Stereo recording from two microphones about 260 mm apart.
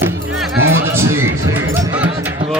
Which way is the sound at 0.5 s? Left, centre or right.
Right.